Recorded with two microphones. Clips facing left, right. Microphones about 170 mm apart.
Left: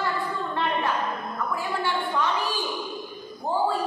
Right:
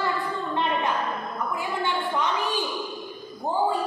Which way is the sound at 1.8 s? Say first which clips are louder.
Right 1 dB; 20° right (ahead or behind).